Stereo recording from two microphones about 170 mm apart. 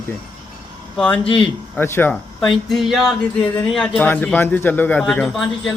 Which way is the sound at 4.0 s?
10° left (ahead or behind).